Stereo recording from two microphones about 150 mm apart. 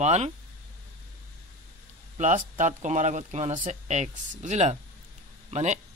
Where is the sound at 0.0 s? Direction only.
50° right (ahead or behind).